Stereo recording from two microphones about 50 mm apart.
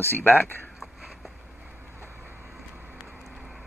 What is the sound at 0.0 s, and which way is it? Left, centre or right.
Speech, left.